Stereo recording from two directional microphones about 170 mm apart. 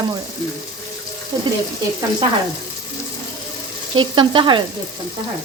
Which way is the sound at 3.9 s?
30° right (ahead or behind).